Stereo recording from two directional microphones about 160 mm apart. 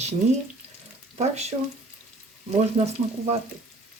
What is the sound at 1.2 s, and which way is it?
Speech, 45° right (ahead or behind).